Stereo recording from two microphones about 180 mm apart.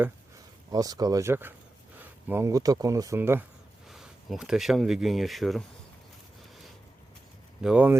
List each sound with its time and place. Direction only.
0.7 s speech: 20° right (ahead or behind)
3.8 s speech: centre (ahead or behind)
7.6 s speech: 5° right (ahead or behind)